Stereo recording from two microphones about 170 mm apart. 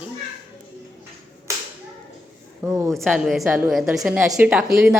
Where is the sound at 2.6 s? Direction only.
10° right (ahead or behind).